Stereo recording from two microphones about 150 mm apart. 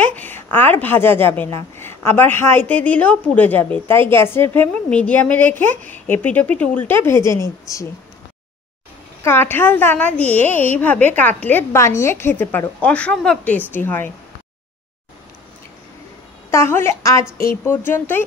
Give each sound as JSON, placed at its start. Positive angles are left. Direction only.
{"t": 0.0, "sound": "a woman's voice", "side_deg": 10}
{"t": 9.2, "sound": "a woman's voice", "side_deg": 15}
{"t": 16.4, "sound": "a woman's voice", "side_deg": 15}